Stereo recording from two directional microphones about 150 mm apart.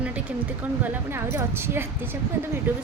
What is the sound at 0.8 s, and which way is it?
A woman's voice, 15° right (ahead or behind).